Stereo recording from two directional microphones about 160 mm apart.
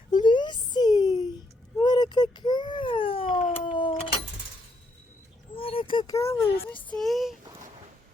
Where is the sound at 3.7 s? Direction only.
30° left (ahead or behind).